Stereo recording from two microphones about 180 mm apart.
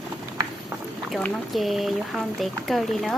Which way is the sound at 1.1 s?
Centre (ahead or behind).